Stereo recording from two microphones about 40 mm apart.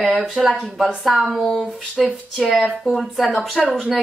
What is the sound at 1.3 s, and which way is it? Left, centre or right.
Speech, centre.